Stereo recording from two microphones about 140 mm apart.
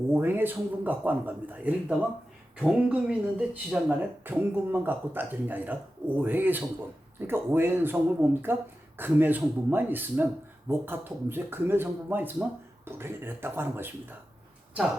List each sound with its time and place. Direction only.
0.1 s speech: 15° right (ahead or behind)